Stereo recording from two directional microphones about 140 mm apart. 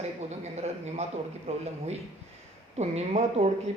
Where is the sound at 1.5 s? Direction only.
45° right (ahead or behind).